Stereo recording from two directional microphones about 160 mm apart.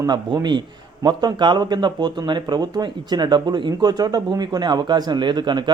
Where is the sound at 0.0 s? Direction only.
25° right (ahead or behind).